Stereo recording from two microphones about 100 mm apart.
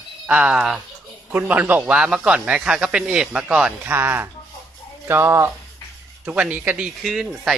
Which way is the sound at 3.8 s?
20° right (ahead or behind).